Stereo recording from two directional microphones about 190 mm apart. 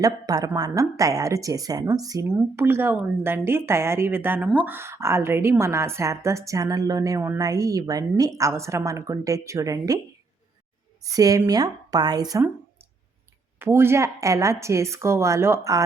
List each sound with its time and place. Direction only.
0.0 s a woman's voice: 20° right (ahead or behind)
11.0 s speech: 20° right (ahead or behind)
13.6 s a woman's voice: 10° right (ahead or behind)